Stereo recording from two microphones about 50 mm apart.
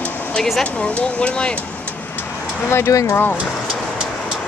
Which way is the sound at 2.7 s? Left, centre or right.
Left.